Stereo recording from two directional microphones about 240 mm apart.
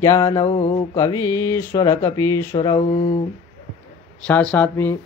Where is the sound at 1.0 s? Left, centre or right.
Centre.